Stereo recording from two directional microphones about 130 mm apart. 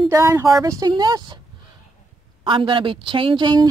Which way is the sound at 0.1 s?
20° right (ahead or behind).